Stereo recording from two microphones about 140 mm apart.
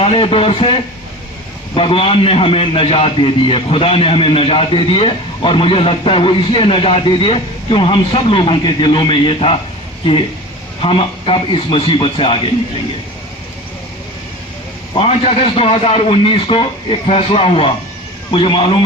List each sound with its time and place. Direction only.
0.0 s a man's voice: 40° left (ahead or behind)
14.9 s a man's voice: 40° left (ahead or behind)